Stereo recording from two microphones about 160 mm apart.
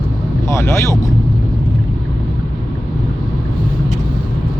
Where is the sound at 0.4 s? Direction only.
15° left (ahead or behind).